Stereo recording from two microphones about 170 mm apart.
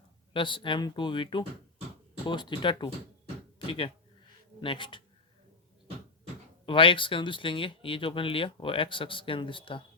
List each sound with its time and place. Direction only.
0.3 s speech: 30° left (ahead or behind)
6.7 s speech: 30° left (ahead or behind)